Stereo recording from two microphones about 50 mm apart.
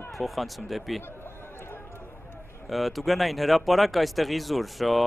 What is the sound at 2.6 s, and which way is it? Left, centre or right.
Speech, centre.